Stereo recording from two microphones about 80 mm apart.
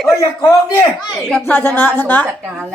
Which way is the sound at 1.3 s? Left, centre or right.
Centre.